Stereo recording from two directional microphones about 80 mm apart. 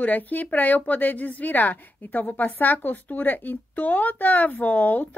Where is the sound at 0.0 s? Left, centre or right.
Left.